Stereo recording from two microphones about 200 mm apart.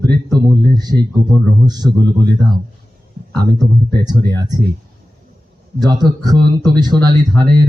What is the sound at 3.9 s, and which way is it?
Speech, 20° right (ahead or behind).